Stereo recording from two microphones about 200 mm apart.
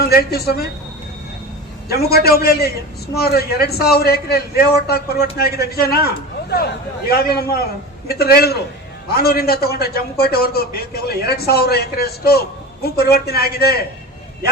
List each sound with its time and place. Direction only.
0.0 s a man's voice: 50° left (ahead or behind)
1.9 s a man's voice: 50° left (ahead or behind)
7.1 s a man's voice: 50° left (ahead or behind)